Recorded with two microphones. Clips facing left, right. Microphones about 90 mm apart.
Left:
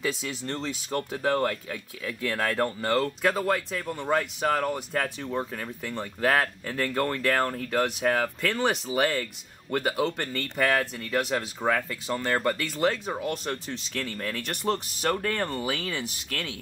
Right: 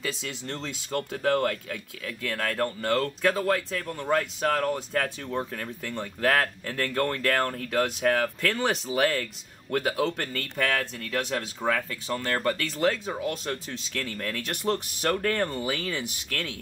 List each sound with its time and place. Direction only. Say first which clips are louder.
0.2 s speech: left 2 dB; 5° left (ahead or behind)
2.3 s speech: left 1 dB; 20° left (ahead or behind)
3.3 s speech: right 3 dB; 5° left (ahead or behind)